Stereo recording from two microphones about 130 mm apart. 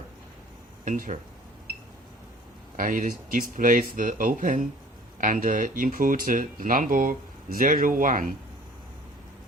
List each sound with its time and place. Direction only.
0.9 s speech: 80° right
2.7 s speech: 90° right